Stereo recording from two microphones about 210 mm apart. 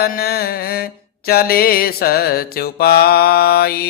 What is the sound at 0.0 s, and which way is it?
Mantra, 45° left (ahead or behind).